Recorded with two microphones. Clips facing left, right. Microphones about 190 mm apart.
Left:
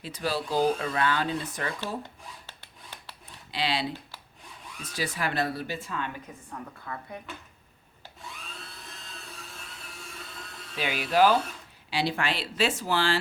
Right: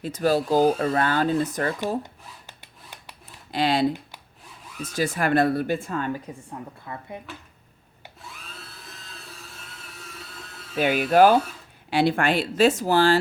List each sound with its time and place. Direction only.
0.0 s speech: 45° right (ahead or behind)
3.5 s speech: 50° right (ahead or behind)
6.5 s a woman's voice: 25° right (ahead or behind)
8.2 s a sound: centre (ahead or behind)
10.8 s speech: 50° right (ahead or behind)